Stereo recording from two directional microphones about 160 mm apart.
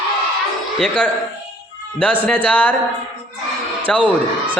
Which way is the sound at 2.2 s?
10° left (ahead or behind).